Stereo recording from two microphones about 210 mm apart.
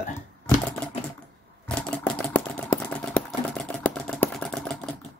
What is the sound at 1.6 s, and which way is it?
Motorcycle, 5° left (ahead or behind).